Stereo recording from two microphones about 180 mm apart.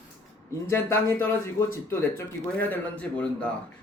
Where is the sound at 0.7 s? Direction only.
15° left (ahead or behind).